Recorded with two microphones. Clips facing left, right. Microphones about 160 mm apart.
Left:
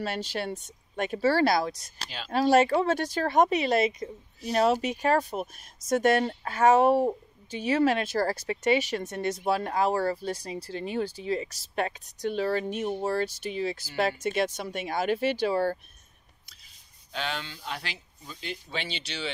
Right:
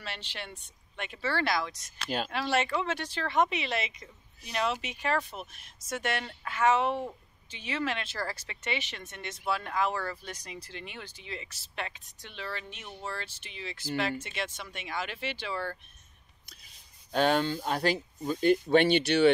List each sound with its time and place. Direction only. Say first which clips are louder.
0.0 s speech: left 11 dB; 40° left (ahead or behind)
17.1 s speech: right 9 dB; 45° right (ahead or behind)